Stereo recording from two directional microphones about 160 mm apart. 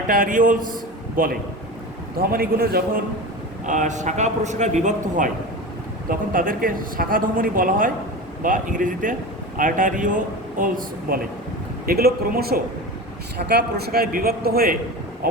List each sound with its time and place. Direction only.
0.1 s a man's voice: 60° right (ahead or behind)
3.7 s a man's voice: 50° right (ahead or behind)
6.1 s speech: 60° right (ahead or behind)
11.9 s a man's voice: 75° right (ahead or behind)
13.5 s a man's voice: 85° right; by 15.4 s 70° right (ahead or behind)